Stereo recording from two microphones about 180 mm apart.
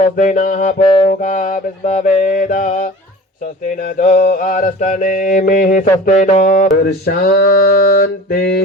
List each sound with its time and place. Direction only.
0.0 s mantra: 45° left (ahead or behind)
0.8 s music: 30° left (ahead or behind)
1.2 s mantra: 45° left (ahead or behind)
7.0 s mantra: 55° left (ahead or behind)
7.9 s a sound: 55° left (ahead or behind)